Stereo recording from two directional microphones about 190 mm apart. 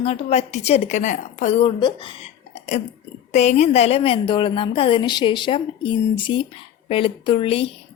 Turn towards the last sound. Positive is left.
turn(degrees=30)  # may be behind; listen again after turning